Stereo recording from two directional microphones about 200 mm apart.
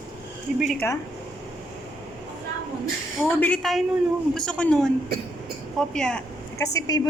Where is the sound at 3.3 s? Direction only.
5° left (ahead or behind).